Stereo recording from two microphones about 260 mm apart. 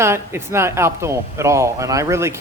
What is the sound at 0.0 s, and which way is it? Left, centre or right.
Speech, centre.